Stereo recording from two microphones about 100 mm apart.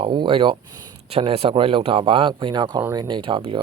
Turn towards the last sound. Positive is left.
turn(degrees=-60)  # may be behind; listen again after turning